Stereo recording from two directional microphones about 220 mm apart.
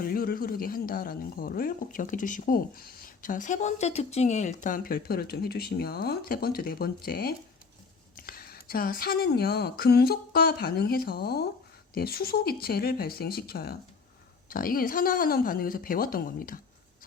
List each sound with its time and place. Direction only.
0.0 s speech: 40° left (ahead or behind)